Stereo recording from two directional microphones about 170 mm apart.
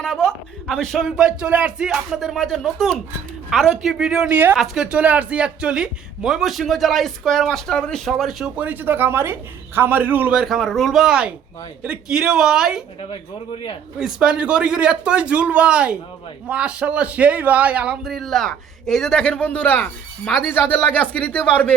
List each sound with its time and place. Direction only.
0.0 s a man's voice: 5° left (ahead or behind)
13.0 s speech: 30° left (ahead or behind)
14.0 s a man's voice: 5° right (ahead or behind)